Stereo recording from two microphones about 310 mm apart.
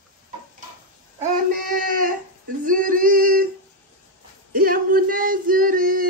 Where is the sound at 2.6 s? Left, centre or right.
Right.